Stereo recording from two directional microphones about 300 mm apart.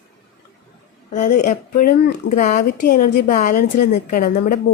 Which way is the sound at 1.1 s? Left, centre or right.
Left.